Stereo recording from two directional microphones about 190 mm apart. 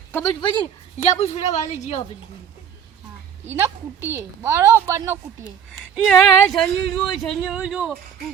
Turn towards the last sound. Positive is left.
turn(degrees=0)  # may be behind; listen again after turning